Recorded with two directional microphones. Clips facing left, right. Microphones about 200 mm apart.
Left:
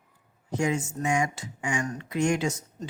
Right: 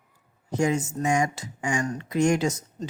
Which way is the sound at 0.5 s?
40° right (ahead or behind).